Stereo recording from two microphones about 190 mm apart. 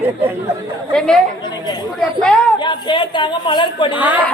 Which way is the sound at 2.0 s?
5° left (ahead or behind).